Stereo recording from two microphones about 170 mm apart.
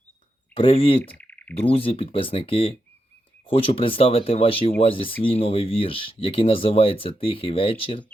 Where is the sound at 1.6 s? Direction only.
35° left (ahead or behind).